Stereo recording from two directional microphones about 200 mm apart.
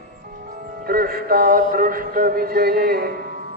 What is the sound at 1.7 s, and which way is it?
A man's voice, 45° right (ahead or behind).